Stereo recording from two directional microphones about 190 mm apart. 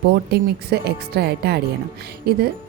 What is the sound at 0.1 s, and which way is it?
A woman's voice, 55° right (ahead or behind).